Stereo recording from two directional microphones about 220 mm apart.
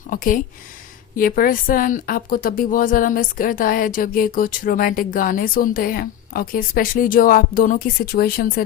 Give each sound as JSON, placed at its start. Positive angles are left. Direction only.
{"t": 0.1, "sound": "speech", "side_deg": 40}